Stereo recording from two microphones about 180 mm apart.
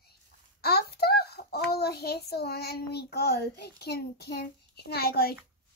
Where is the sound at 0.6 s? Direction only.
60° left (ahead or behind).